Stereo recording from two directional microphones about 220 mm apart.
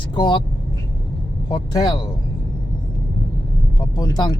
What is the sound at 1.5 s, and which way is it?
Speech, 20° left (ahead or behind).